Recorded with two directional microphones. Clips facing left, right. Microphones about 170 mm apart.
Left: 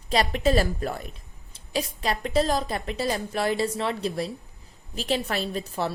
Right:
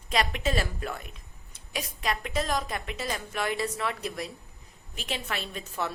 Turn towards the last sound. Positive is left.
turn(degrees=35)  # may be behind; listen again after turning